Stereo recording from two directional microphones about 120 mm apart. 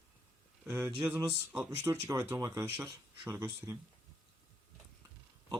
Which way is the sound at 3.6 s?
25° right (ahead or behind).